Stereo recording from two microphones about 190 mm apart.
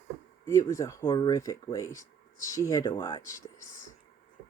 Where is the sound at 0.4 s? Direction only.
15° left (ahead or behind).